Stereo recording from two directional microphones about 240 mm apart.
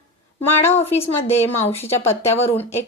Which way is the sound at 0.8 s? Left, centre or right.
Left.